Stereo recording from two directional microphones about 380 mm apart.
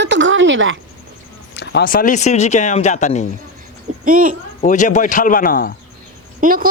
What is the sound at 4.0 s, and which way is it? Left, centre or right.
Speech, right.